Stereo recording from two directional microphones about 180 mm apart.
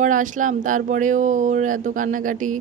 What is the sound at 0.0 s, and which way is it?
Speech, 45° right (ahead or behind).